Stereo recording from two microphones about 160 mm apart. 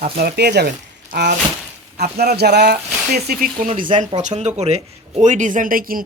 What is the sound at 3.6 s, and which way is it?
Speech, 55° right (ahead or behind).